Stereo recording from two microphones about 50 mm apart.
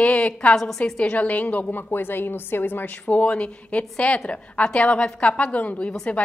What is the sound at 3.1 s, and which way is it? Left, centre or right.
A woman's voice, left.